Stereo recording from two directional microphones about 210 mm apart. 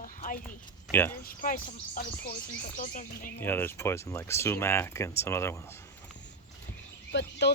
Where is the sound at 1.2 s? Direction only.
40° left (ahead or behind).